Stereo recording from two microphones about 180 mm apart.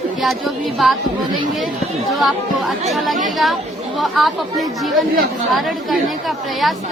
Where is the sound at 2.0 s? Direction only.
Centre (ahead or behind).